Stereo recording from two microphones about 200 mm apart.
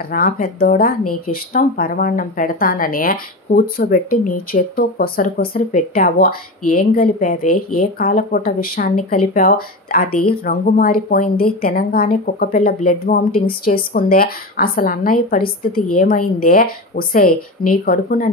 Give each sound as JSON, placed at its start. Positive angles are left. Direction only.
{"t": 0.1, "sound": "speech", "side_deg": 45}